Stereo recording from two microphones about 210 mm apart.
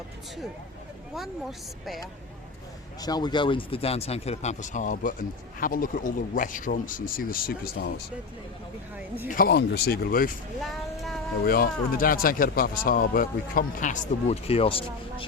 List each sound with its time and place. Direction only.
1.1 s speech: centre (ahead or behind)
3.0 s speech: 20° left (ahead or behind); by 7.9 s 45° left (ahead or behind)
9.3 s speech: 45° left (ahead or behind)
10.6 s a sound: centre (ahead or behind)
11.4 s speech: 45° left (ahead or behind); by 15.3 s 25° left (ahead or behind)